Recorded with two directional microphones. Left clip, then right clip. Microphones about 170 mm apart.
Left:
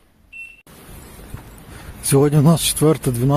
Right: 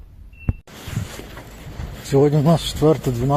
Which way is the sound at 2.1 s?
65° left (ahead or behind).